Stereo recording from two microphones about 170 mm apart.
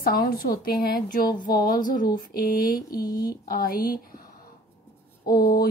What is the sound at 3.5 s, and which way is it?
Speech, 60° left (ahead or behind).